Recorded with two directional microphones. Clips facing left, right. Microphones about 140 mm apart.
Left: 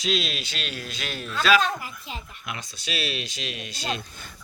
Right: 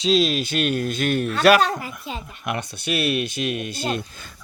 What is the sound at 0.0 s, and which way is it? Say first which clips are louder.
Speech: right 9 dB; 40° right (ahead or behind).